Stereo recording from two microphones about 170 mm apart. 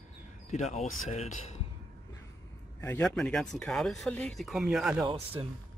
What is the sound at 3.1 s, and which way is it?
Speech, 5° left (ahead or behind).